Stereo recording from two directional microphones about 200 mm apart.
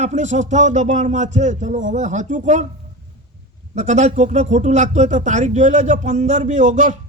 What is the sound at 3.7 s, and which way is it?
A man's voice, 35° right (ahead or behind).